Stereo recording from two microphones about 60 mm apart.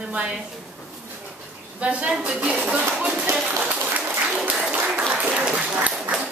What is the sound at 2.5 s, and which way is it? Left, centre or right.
Speech, right.